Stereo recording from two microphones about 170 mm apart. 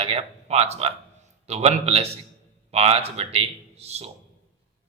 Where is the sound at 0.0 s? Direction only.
35° right (ahead or behind).